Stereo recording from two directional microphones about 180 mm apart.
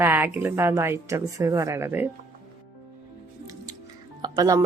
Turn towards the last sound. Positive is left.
turn(degrees=-20)  # may be behind; listen again after turning